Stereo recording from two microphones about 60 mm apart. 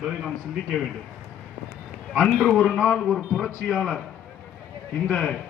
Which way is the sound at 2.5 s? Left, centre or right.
Centre.